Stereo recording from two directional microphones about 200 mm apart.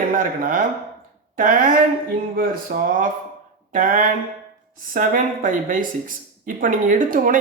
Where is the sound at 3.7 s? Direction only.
45° right (ahead or behind).